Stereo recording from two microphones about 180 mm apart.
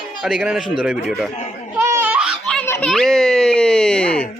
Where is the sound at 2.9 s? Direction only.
Centre (ahead or behind).